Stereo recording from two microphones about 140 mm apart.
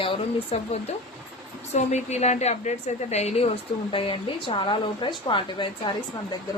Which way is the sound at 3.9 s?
40° left (ahead or behind).